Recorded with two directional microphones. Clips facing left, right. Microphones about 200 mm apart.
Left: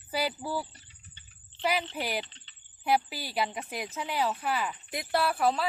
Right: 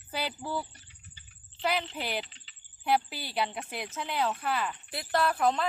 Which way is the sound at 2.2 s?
5° right (ahead or behind).